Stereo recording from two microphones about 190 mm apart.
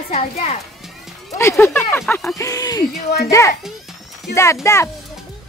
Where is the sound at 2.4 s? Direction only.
20° left (ahead or behind).